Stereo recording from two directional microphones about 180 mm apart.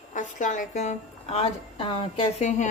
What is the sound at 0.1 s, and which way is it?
A woman's voice, 45° left (ahead or behind).